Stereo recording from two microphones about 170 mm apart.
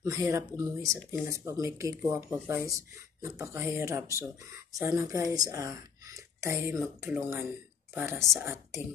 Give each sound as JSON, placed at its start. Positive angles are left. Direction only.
{"t": 0.0, "sound": "speech", "side_deg": -20}
{"t": 8.2, "sound": "speech", "side_deg": 0}